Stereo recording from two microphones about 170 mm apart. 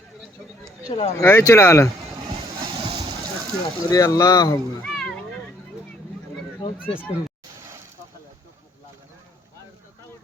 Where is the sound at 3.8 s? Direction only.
20° left (ahead or behind).